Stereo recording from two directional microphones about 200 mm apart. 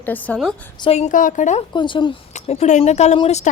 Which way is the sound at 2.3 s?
35° left (ahead or behind).